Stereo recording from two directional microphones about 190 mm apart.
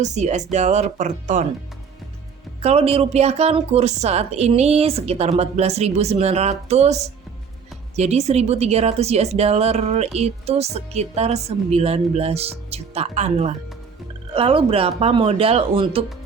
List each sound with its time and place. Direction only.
0.0 s speech: 40° right (ahead or behind)
2.6 s speech: 30° right (ahead or behind)